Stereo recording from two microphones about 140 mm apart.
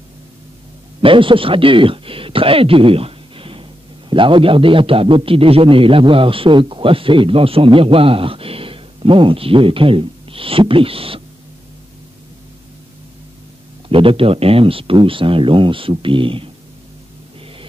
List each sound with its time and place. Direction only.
1.0 s a man's voice: 40° right (ahead or behind)
13.8 s a man's voice: 40° right (ahead or behind)